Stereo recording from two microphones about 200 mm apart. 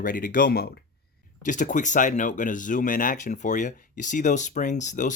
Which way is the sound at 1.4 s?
40° left (ahead or behind).